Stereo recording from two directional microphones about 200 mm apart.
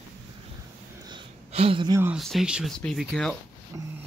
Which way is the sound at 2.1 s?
Centre (ahead or behind).